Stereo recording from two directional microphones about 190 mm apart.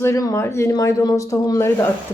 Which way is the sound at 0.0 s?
15° left (ahead or behind).